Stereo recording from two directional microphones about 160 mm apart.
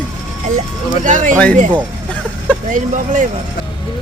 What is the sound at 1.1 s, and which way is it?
Speech, 50° right (ahead or behind).